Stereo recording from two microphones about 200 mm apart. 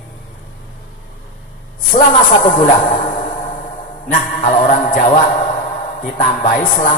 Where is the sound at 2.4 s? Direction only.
40° left (ahead or behind).